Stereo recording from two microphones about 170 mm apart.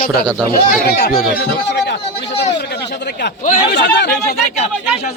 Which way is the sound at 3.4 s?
70° left (ahead or behind).